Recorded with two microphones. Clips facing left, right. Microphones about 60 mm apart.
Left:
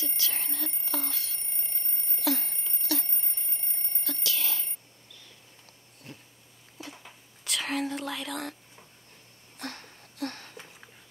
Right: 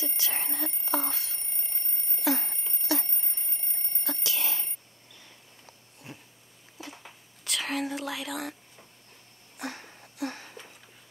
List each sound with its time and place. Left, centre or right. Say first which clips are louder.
0.3 s alarm clock: right 3 dB; centre
4.0 s alarm clock: right 1 dB; centre
6.1 s cat: right 1 dB; centre
6.8 s whispering: even; centre
9.6 s a sound: right 2 dB; centre